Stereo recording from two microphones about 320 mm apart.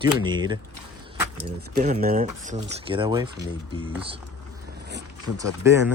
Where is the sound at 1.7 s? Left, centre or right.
Right.